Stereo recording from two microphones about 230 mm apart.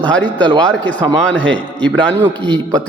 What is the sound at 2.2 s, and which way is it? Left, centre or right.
Speech, centre.